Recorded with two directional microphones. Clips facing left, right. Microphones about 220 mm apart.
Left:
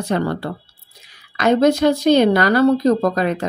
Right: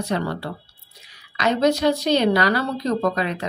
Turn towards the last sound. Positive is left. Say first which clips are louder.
# left 4 dB
turn(degrees=45)  # may be behind; listen again after turning